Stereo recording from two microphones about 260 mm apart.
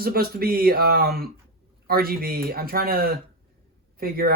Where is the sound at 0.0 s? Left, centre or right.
Right.